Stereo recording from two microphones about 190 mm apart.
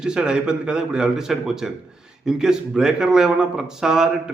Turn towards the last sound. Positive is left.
turn(degrees=-5)  # may be behind; listen again after turning